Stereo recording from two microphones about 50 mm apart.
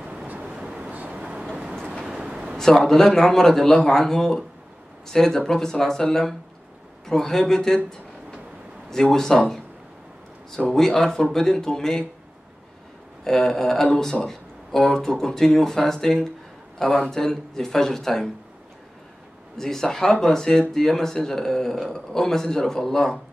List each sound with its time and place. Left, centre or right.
0.5 s a sound: centre
0.9 s vehicle: right
2.1 s a sound: centre
2.5 s a man's voice: centre
9.0 s a man's voice: centre
10.7 s a man's voice: centre
13.2 s a man's voice: centre
19.5 s a man's voice: centre